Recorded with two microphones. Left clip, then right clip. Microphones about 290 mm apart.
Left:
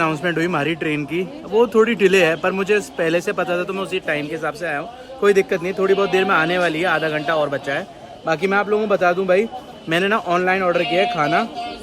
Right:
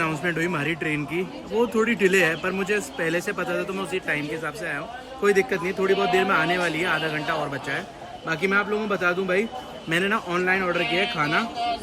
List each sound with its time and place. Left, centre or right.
0.0 s speech: centre